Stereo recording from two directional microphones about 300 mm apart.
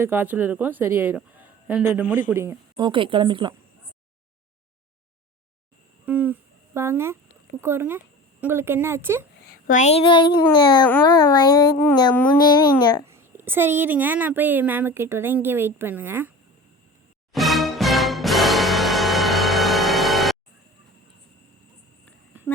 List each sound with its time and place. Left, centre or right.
0.0 s speech: centre
2.0 s humming: centre
2.3 s a woman's voice: centre
6.1 s humming: centre
6.7 s a woman's voice: centre
9.5 s speech: left
13.1 s a woman's voice: centre
17.3 s music: centre